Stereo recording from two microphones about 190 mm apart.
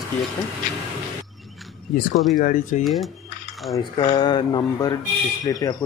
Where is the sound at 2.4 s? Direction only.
45° left (ahead or behind).